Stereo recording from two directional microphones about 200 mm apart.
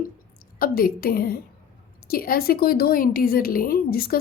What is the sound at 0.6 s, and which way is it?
A woman's voice, 45° left (ahead or behind).